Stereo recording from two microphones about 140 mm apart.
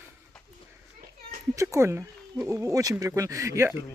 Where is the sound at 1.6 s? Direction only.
20° right (ahead or behind).